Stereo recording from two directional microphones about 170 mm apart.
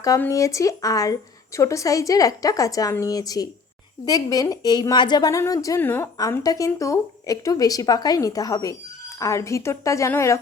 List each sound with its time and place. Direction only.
0.2 s a woman's voice: 20° left (ahead or behind)